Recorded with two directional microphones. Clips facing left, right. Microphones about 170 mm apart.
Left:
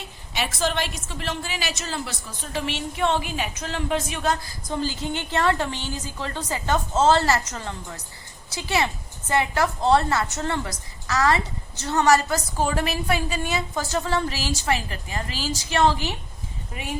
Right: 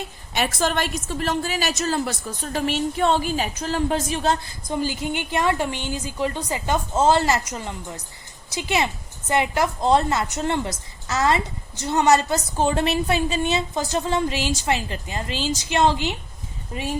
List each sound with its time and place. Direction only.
0.3 s a woman's voice: 50° right (ahead or behind); by 4.5 s 30° right (ahead or behind)
4.7 s a woman's voice: 15° right (ahead or behind)